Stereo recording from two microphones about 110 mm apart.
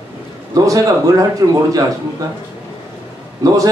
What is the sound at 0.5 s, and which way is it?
Speech, 30° right (ahead or behind).